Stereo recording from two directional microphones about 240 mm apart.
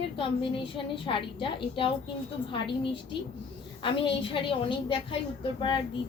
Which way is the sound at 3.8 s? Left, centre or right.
Left.